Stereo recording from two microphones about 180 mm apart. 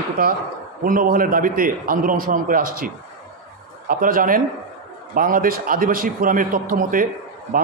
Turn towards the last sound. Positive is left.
turn(degrees=-50)  # may be behind; listen again after turning